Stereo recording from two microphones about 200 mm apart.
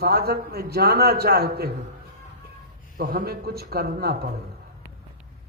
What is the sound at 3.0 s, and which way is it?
A man's voice, 45° right (ahead or behind).